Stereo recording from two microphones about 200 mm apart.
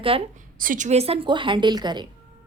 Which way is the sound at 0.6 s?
40° right (ahead or behind).